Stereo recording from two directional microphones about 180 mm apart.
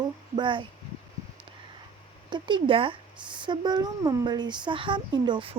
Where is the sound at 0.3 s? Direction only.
25° right (ahead or behind).